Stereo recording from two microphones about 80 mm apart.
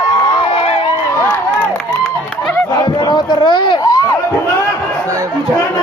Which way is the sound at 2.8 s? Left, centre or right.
Left.